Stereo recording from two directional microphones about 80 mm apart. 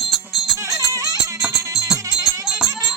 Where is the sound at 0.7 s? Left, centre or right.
Right.